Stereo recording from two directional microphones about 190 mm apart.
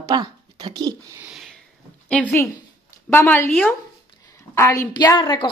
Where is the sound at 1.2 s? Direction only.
Centre (ahead or behind).